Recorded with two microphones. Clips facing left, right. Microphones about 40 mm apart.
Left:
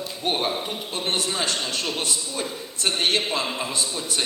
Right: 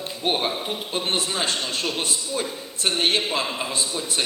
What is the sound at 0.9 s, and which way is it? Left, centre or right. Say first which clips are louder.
A man's voice: right 1 dB; centre.